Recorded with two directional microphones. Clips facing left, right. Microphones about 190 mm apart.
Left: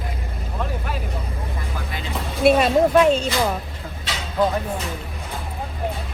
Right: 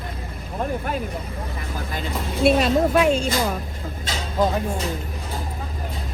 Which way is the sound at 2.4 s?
55° left (ahead or behind).